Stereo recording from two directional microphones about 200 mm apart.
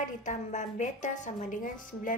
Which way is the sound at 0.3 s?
35° left (ahead or behind).